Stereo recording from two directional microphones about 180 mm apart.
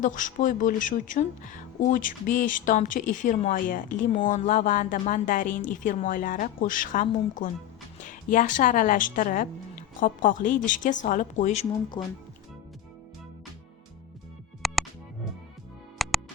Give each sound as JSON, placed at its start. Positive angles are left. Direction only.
{"t": 0.0, "sound": "speech", "side_deg": 45}
{"t": 12.0, "sound": "speech", "side_deg": 25}
{"t": 14.6, "sound": "music", "side_deg": 0}